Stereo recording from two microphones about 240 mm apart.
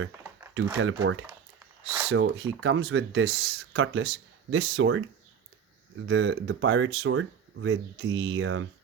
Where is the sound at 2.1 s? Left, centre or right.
Right.